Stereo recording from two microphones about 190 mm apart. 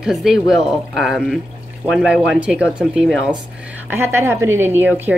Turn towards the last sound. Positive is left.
turn(degrees=-10)  # may be behind; listen again after turning